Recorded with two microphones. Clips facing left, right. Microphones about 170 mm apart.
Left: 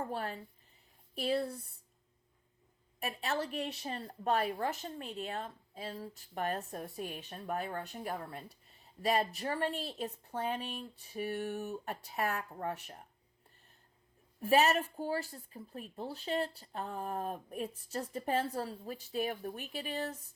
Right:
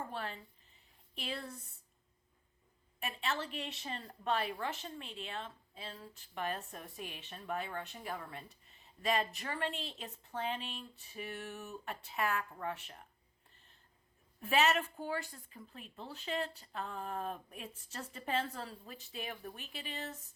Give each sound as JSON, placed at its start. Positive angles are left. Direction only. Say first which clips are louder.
{"t": 0.1, "sound": "speech", "louder": "left 4 dB", "side_deg": 40}
{"t": 3.0, "sound": "speech", "louder": "left 3 dB", "side_deg": 40}
{"t": 14.5, "sound": "speech", "louder": "left 3 dB", "side_deg": 40}